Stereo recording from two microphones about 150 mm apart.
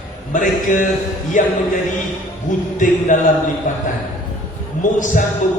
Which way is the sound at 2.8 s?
60° left (ahead or behind).